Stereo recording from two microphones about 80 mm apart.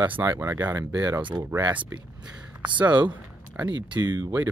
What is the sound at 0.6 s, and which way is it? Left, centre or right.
Speech, right.